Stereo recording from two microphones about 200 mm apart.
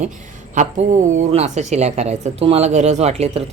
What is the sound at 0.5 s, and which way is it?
Speech, 35° right (ahead or behind).